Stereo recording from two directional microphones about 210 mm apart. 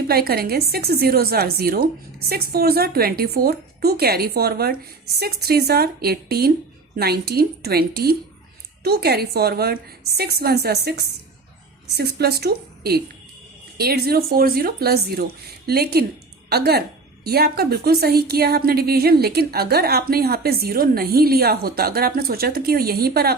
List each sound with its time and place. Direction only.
0.1 s a woman's voice: 45° right (ahead or behind)